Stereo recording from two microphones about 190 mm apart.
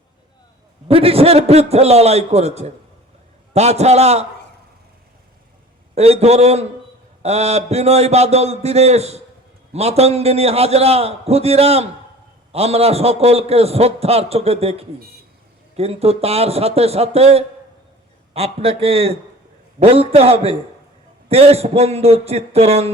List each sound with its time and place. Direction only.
0.9 s a man's voice: 30° right (ahead or behind)
5.9 s a man's voice: 35° right (ahead or behind)